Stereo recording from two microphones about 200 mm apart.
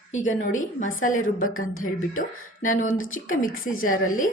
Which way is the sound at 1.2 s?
90° left.